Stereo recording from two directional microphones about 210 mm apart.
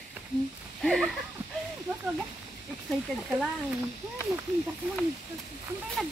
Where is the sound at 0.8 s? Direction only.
Centre (ahead or behind).